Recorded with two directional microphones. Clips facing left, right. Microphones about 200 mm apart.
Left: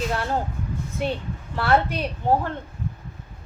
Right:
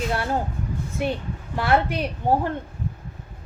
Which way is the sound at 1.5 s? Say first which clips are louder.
Even; 10° right (ahead or behind).